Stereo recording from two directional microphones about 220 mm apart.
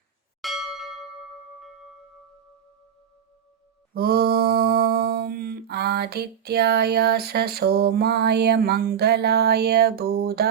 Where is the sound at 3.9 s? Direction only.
45° right (ahead or behind).